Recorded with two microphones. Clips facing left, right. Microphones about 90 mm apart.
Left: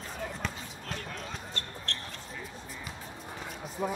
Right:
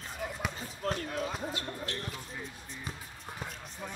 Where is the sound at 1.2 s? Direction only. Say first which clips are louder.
Right 4 dB; 5° right (ahead or behind).